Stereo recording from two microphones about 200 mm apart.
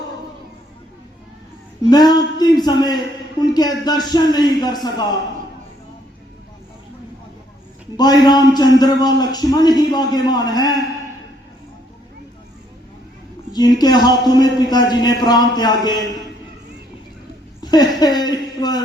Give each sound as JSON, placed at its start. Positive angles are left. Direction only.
{"t": 1.9, "sound": "a man's voice", "side_deg": 20}
{"t": 7.9, "sound": "a man's voice", "side_deg": 20}
{"t": 13.5, "sound": "a man's voice", "side_deg": 20}
{"t": 17.6, "sound": "speech", "side_deg": 20}